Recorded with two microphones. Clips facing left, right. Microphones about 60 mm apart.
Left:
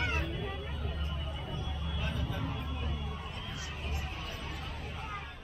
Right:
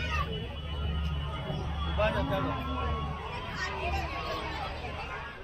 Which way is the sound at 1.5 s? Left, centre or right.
Right.